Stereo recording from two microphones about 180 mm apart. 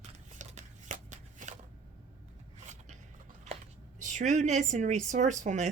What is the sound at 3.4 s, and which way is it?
Speech, 40° right (ahead or behind).